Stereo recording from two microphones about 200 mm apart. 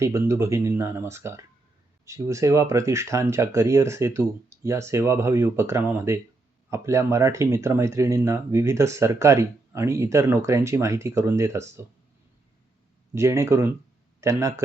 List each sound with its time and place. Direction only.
0.0 s speech: 15° right (ahead or behind)
13.1 s speech: 15° right (ahead or behind)